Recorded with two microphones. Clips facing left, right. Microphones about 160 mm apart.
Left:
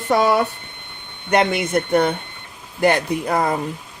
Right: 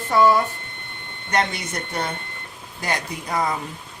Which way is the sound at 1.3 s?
55° left (ahead or behind).